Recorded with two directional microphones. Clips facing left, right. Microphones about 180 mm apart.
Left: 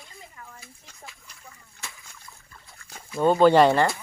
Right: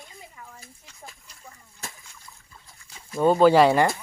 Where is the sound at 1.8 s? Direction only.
45° right (ahead or behind).